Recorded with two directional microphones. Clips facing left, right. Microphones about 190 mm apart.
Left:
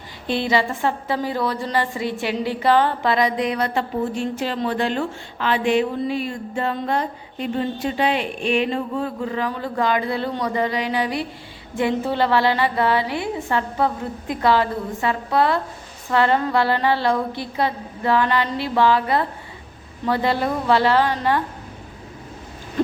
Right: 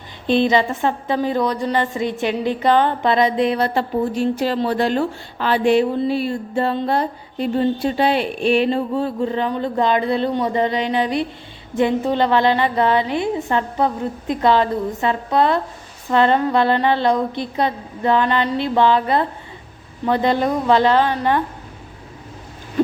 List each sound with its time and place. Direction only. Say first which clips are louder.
0.3 s a woman's voice: right 5 dB; 20° right (ahead or behind)